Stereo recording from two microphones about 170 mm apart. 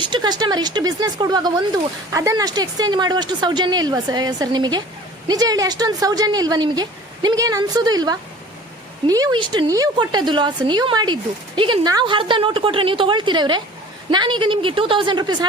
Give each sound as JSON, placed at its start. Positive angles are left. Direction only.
{"t": 0.0, "sound": "speech", "side_deg": -25}